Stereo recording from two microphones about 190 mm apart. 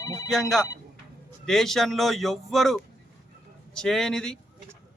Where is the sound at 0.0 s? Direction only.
15° left (ahead or behind).